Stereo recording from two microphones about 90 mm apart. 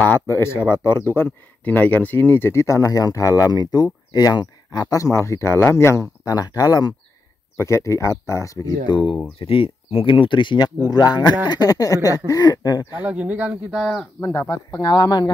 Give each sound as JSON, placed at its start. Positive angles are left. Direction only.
{"t": 0.0, "sound": "speech", "side_deg": 25}
{"t": 7.5, "sound": "speech", "side_deg": 30}
{"t": 8.8, "sound": "speech", "side_deg": 60}
{"t": 9.4, "sound": "speech", "side_deg": 90}
{"t": 10.9, "sound": "speech", "side_deg": 45}
{"t": 12.9, "sound": "speech", "side_deg": -15}
{"t": 13.7, "sound": "speech", "side_deg": 0}
{"t": 14.2, "sound": "speech", "side_deg": 30}
{"t": 14.7, "sound": "speech", "side_deg": 50}